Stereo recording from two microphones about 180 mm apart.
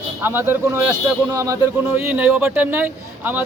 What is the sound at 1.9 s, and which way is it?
A man's voice, 10° right (ahead or behind).